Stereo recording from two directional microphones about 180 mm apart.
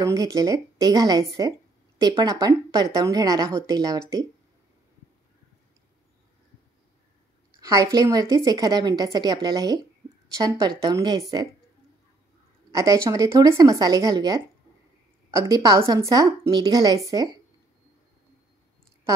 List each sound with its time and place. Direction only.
0.0 s a woman's voice: 20° right (ahead or behind)
7.6 s a woman's voice: 20° right (ahead or behind)
10.9 s a woman's voice: 20° right (ahead or behind)
12.7 s a woman's voice: 15° right (ahead or behind)